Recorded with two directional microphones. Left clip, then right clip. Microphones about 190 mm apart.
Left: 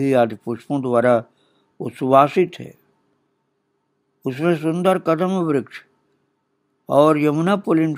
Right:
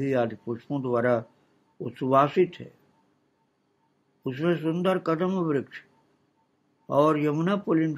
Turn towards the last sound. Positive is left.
turn(degrees=40)  # may be behind; listen again after turning